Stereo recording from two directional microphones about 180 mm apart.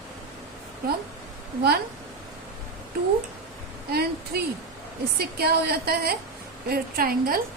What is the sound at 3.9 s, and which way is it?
A woman's voice, 60° right (ahead or behind).